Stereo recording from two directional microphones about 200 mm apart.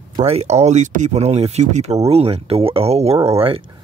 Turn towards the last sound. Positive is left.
turn(degrees=-30)  # may be behind; listen again after turning